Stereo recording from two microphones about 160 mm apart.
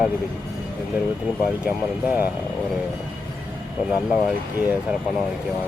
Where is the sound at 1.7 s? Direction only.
10° right (ahead or behind).